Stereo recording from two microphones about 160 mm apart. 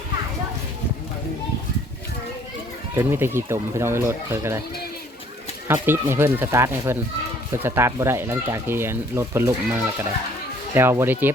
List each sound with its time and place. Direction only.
2.9 s speech: 15° right (ahead or behind)
5.6 s speech: 15° right (ahead or behind)